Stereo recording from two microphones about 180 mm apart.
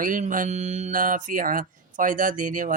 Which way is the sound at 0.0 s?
50° right (ahead or behind).